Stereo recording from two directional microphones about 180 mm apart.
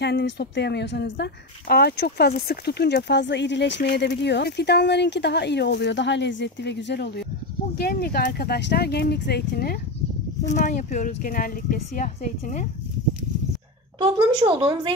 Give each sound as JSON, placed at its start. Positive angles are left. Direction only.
{"t": 0.0, "sound": "a woman's voice", "side_deg": 70}
{"t": 7.7, "sound": "speech", "side_deg": 60}
{"t": 10.5, "sound": "speech", "side_deg": 45}
{"t": 13.9, "sound": "speech", "side_deg": -30}